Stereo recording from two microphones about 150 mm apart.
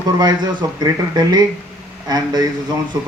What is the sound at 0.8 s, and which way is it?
Speech, 25° right (ahead or behind).